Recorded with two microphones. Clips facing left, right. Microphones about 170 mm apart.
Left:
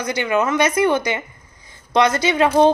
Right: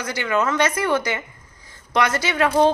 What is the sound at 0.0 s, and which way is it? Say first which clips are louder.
A woman's voice: left 3 dB; 20° left (ahead or behind).